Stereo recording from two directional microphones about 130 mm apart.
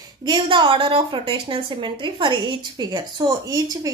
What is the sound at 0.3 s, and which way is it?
A woman's voice, 35° right (ahead or behind).